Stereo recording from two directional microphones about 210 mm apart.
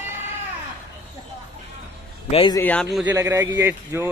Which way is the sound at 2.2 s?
20° left (ahead or behind).